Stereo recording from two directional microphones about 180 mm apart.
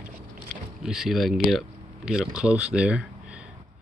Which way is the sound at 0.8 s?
5° right (ahead or behind).